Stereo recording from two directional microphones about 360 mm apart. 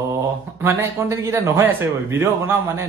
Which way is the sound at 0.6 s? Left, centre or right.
Centre.